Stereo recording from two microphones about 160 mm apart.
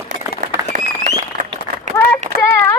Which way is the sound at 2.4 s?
15° left (ahead or behind).